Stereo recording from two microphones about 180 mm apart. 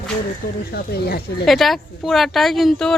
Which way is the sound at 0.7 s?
60° left (ahead or behind).